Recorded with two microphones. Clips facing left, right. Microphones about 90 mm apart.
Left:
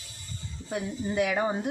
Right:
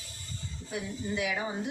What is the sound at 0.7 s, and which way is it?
Speech, 45° left (ahead or behind).